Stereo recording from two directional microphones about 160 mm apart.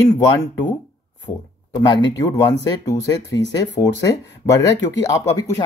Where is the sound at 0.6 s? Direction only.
50° left (ahead or behind).